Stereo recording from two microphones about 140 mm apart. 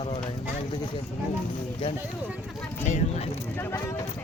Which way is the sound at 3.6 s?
20° left (ahead or behind).